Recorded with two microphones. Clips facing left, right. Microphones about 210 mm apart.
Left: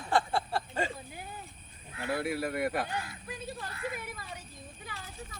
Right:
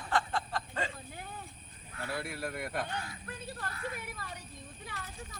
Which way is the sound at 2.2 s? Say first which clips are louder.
Left 7 dB; 65° left (ahead or behind).